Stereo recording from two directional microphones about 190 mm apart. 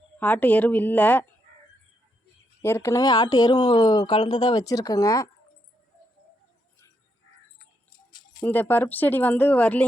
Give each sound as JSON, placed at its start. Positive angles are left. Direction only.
{"t": 0.2, "sound": "speech", "side_deg": 10}
{"t": 2.6, "sound": "speech", "side_deg": 15}
{"t": 8.4, "sound": "speech", "side_deg": 10}